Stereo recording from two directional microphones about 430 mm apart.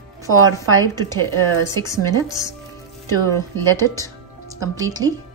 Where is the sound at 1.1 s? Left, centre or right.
Centre.